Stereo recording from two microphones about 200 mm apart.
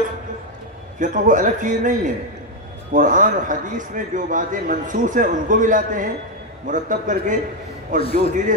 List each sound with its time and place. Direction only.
0.9 s a man's voice: 40° right (ahead or behind)